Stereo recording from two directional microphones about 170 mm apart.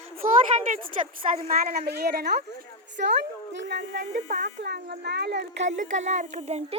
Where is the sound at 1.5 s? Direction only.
65° right (ahead or behind).